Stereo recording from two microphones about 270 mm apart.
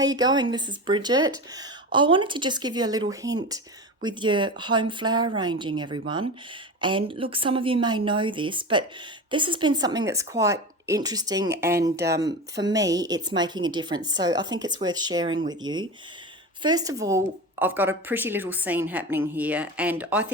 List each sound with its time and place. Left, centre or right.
0.0 s a woman's voice: centre
16.6 s a woman's voice: centre